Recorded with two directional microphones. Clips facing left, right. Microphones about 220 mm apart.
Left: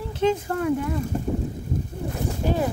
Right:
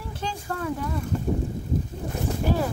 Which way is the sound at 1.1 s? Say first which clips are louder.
Left 1 dB; 40° left (ahead or behind).